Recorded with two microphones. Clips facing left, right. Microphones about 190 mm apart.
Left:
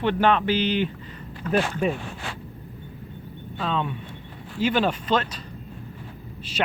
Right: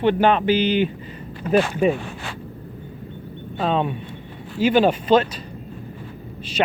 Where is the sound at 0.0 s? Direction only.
5° right (ahead or behind).